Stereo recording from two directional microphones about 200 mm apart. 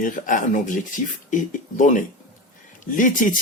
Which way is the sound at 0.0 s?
40° left (ahead or behind).